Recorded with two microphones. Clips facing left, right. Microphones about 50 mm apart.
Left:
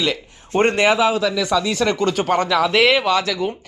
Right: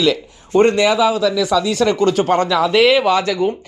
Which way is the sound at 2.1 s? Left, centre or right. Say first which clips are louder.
Right 3 dB; centre.